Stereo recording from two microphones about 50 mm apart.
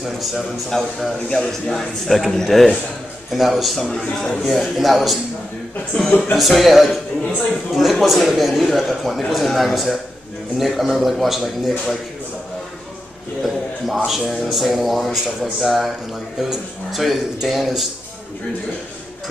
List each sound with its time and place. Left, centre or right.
0.0 s speech: centre
0.7 s a man's voice: centre
6.0 s speech: left
6.3 s speech: centre
13.4 s speech: centre